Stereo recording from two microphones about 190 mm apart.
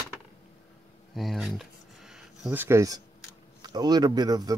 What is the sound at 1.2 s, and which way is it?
Speech, centre (ahead or behind).